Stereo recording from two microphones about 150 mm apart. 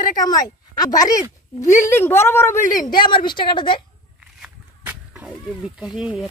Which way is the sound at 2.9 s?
30° left (ahead or behind).